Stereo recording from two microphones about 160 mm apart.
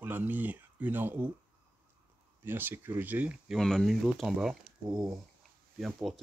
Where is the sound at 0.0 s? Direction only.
10° right (ahead or behind).